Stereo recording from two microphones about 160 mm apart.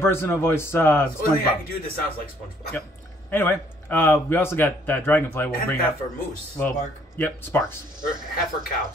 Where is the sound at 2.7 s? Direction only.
10° left (ahead or behind).